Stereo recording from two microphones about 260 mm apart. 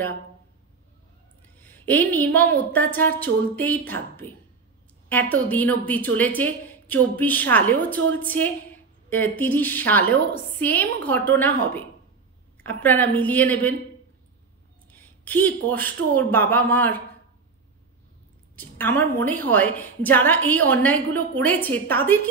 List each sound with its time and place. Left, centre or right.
1.6 s a woman's voice: centre
14.9 s a woman's voice: centre
18.6 s a woman's voice: centre